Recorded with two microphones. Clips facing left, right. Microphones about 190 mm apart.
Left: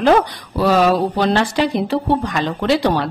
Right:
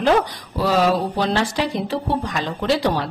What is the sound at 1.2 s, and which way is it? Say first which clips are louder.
Speech: left 4 dB; 60° left (ahead or behind).